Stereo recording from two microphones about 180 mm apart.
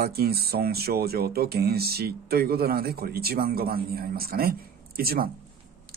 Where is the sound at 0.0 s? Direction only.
60° right (ahead or behind).